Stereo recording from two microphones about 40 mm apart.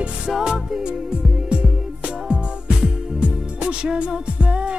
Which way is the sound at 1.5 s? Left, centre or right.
Right.